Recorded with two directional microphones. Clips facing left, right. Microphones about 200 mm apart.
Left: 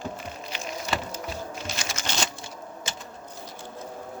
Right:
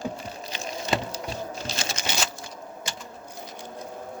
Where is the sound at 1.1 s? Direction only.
35° right (ahead or behind).